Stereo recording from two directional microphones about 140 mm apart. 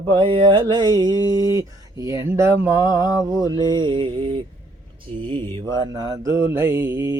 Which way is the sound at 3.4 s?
30° right (ahead or behind).